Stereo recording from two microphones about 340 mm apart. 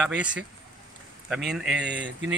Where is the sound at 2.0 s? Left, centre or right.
Right.